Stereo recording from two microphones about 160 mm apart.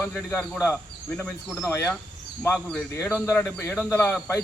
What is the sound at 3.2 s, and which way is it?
Speech, 15° left (ahead or behind).